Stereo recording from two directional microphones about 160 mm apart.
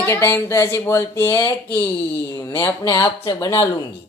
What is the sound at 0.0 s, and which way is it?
Speech, 15° left (ahead or behind).